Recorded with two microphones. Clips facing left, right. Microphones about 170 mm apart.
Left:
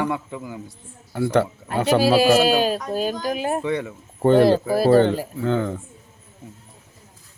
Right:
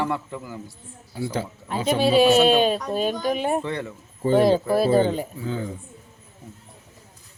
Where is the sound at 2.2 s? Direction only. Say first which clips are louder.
Even; 5° left (ahead or behind).